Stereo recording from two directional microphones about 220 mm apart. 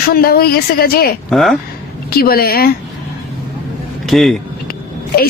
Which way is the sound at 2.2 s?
45° left (ahead or behind).